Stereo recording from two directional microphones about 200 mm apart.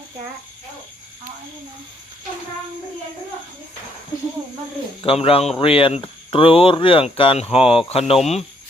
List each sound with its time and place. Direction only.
5.0 s speech: 30° left (ahead or behind)